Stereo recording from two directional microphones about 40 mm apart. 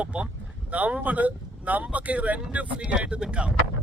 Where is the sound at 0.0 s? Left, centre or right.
Right.